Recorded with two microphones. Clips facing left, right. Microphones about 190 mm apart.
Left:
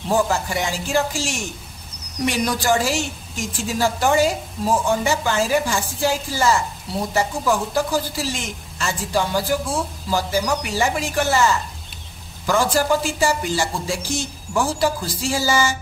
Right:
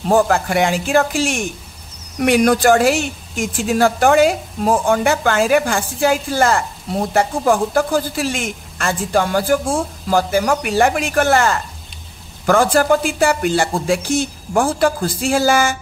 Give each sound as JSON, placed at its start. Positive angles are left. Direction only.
{"t": 0.1, "sound": "a woman's voice", "side_deg": -55}